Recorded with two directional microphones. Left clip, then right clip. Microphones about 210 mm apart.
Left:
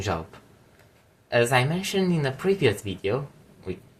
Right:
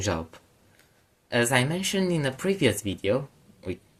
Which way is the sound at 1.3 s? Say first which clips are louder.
Left 2 dB; 40° right (ahead or behind).